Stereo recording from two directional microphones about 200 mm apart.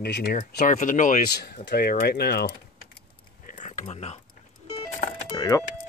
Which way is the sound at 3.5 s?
40° left (ahead or behind).